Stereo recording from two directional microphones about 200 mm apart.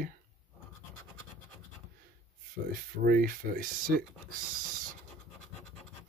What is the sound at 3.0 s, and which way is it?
Speech, 50° right (ahead or behind).